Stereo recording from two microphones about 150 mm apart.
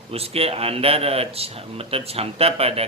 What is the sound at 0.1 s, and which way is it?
A man's voice, 40° right (ahead or behind).